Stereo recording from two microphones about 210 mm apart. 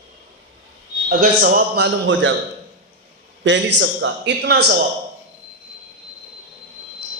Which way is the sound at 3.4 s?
60° right (ahead or behind).